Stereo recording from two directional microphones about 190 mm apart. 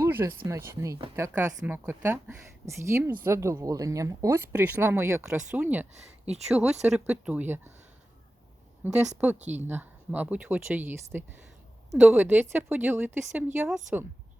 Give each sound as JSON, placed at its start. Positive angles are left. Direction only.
{"t": 0.0, "sound": "a sound", "side_deg": -10}
{"t": 0.4, "sound": "a woman's voice", "side_deg": -15}
{"t": 8.8, "sound": "a woman's voice", "side_deg": -10}
{"t": 9.4, "sound": "speech", "side_deg": -35}
{"t": 9.6, "sound": "a woman's voice", "side_deg": -10}